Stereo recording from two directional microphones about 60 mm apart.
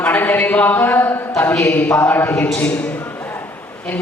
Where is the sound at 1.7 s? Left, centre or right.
Left.